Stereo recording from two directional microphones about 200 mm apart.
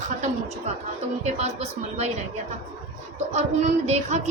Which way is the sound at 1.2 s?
35° right (ahead or behind).